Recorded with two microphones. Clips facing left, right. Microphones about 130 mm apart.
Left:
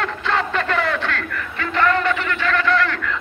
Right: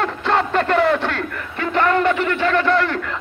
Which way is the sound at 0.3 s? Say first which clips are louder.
Right 4 dB; 40° right (ahead or behind).